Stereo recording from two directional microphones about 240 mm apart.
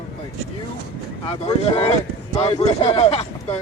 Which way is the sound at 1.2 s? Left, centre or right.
Left.